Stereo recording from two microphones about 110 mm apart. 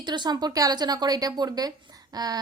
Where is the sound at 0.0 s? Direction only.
45° right (ahead or behind).